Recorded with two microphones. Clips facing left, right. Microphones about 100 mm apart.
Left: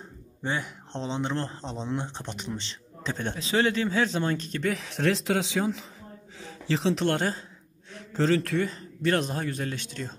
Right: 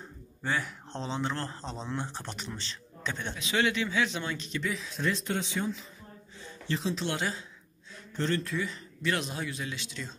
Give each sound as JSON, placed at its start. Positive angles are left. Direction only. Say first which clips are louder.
{"t": 0.4, "sound": "a man's voice", "louder": "left 1 dB", "side_deg": 25}
{"t": 4.7, "sound": "speech", "louder": "left 5 dB", "side_deg": 75}
{"t": 6.3, "sound": "a sound", "louder": "left 5 dB", "side_deg": 90}
{"t": 7.1, "sound": "speech", "louder": "left 6 dB", "side_deg": 45}
{"t": 7.9, "sound": "a man's voice", "louder": "left 7 dB", "side_deg": 90}
{"t": 8.6, "sound": "speech", "louder": "left 5 dB", "side_deg": 40}